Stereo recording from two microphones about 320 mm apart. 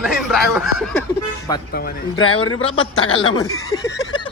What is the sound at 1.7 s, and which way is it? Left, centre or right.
Speech, left.